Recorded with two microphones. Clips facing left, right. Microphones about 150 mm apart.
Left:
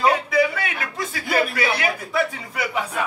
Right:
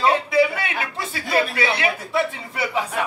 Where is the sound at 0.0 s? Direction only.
30° right (ahead or behind).